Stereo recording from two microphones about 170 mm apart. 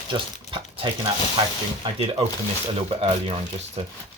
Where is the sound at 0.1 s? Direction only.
30° right (ahead or behind).